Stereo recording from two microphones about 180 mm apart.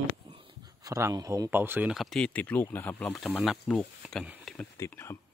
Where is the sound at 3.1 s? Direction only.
5° right (ahead or behind).